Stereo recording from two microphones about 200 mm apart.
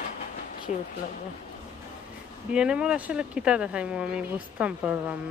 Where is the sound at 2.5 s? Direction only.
5° right (ahead or behind).